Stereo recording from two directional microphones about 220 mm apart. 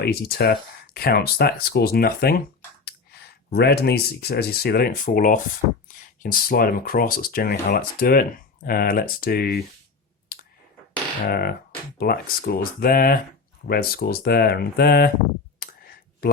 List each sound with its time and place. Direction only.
0.0 s speech: 45° left (ahead or behind)
3.5 s speech: 45° left (ahead or behind)
10.3 s clicking: 40° left (ahead or behind)
11.3 s speech: 45° left (ahead or behind)